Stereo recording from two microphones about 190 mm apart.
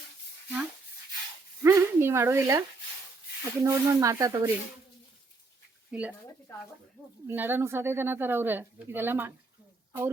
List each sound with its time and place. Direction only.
1.6 s a sound: 15° right (ahead or behind)
3.4 s speech: 15° right (ahead or behind)
5.9 s speech: 10° right (ahead or behind)
6.5 s speech: 10° left (ahead or behind)
7.3 s speech: 10° right (ahead or behind)